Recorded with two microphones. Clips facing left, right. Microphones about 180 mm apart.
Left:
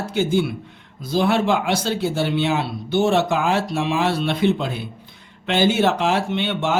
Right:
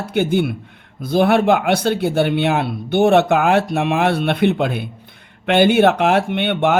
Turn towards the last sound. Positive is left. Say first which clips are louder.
# right 5 dB
turn(degrees=-60)  # may be behind; listen again after turning